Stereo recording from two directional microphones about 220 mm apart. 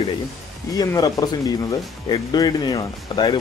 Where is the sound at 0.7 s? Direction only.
15° left (ahead or behind).